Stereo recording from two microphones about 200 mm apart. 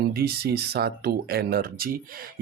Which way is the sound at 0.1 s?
50° right (ahead or behind).